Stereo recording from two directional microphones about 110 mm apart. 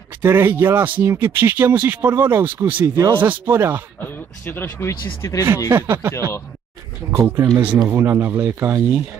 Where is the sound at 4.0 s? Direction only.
20° left (ahead or behind).